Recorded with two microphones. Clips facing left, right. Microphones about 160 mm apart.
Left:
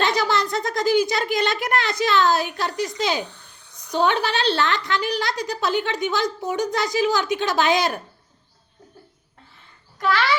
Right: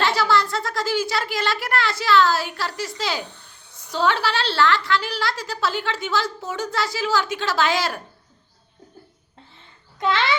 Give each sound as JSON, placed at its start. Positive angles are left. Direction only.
{"t": 0.0, "sound": "a woman's voice", "side_deg": 20}
{"t": 10.0, "sound": "a child's voice", "side_deg": -20}